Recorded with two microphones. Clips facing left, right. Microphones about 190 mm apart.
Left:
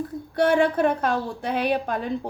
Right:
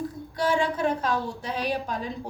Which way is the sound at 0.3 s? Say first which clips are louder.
Left 6 dB; 60° left (ahead or behind).